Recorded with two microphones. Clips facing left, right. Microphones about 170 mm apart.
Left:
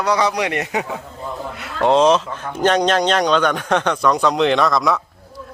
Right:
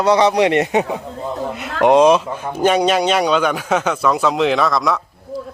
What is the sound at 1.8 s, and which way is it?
A man's voice, 15° right (ahead or behind).